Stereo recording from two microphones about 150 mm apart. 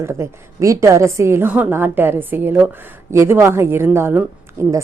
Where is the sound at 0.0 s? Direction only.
20° right (ahead or behind).